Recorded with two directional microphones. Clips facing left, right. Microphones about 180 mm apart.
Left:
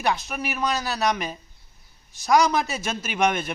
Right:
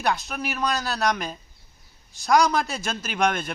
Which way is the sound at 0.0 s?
Centre (ahead or behind).